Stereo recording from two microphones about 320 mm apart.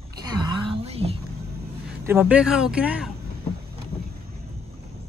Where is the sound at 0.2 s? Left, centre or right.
Centre.